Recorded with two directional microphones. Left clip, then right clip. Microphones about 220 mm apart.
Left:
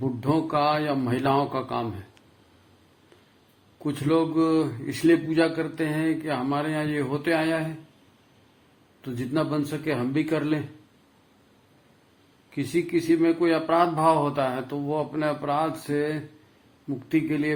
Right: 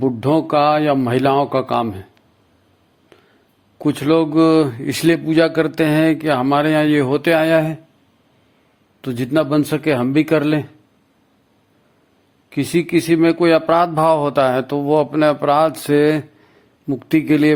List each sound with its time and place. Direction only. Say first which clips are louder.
0.0 s a man's voice: right 9 dB; 40° right (ahead or behind)
3.8 s a man's voice: right 8 dB; 45° right (ahead or behind)
9.0 s a man's voice: right 10 dB; 45° right (ahead or behind)
12.5 s a man's voice: right 8 dB; 45° right (ahead or behind)